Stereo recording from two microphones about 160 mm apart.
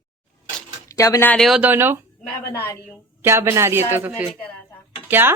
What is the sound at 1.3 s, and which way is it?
Speech, centre (ahead or behind).